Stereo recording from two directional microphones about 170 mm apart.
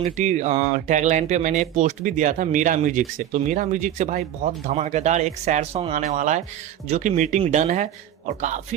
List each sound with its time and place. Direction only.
0.0 s speech: 45° right (ahead or behind)